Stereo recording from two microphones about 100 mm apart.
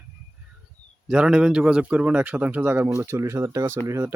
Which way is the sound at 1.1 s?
10° right (ahead or behind).